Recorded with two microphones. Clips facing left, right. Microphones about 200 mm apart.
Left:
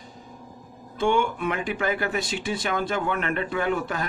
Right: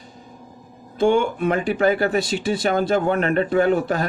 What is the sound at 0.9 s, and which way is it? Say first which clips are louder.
A man's voice: right 5 dB; 35° right (ahead or behind).